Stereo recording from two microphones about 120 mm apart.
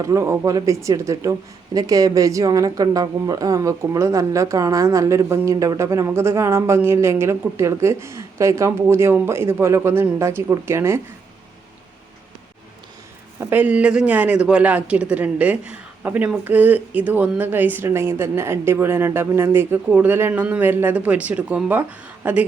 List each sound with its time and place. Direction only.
0.0 s speech: 25° right (ahead or behind)
13.4 s a man's voice: 15° right (ahead or behind)